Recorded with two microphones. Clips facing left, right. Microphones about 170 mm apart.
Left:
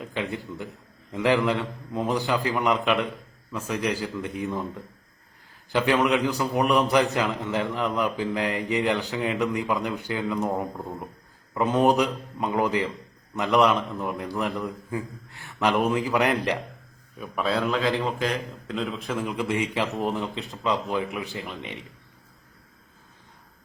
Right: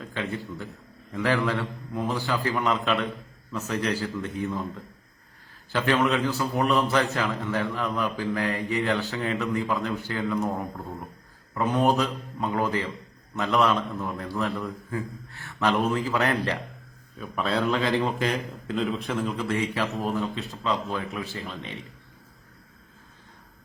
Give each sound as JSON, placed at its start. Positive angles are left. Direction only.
{"t": 0.0, "sound": "a man's voice", "side_deg": 15}
{"t": 17.2, "sound": "a man's voice", "side_deg": 5}
{"t": 19.2, "sound": "a man's voice", "side_deg": 15}